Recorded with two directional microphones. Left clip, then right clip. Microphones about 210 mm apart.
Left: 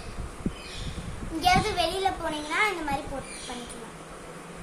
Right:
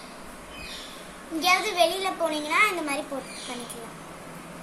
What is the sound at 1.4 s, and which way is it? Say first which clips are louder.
Speech: right 2 dB; 15° left (ahead or behind).